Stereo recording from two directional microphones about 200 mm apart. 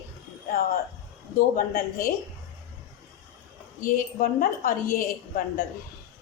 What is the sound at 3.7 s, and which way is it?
A woman's voice, 45° left (ahead or behind).